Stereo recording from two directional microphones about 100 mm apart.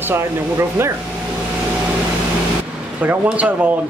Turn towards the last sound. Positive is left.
turn(degrees=-15)  # may be behind; listen again after turning